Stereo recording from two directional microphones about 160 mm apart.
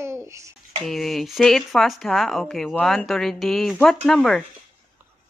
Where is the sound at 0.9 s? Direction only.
Centre (ahead or behind).